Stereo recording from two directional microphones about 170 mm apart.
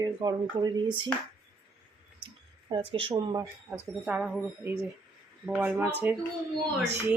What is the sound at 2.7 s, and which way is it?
Speech, 30° right (ahead or behind).